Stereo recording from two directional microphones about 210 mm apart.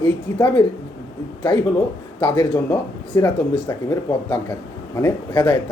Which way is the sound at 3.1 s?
15° left (ahead or behind).